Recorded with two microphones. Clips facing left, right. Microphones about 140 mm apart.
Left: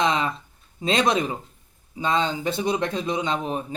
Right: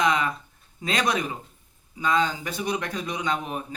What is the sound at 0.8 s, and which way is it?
Speech, 25° left (ahead or behind).